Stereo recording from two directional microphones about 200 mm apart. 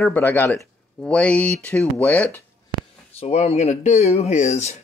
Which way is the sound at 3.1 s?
30° left (ahead or behind).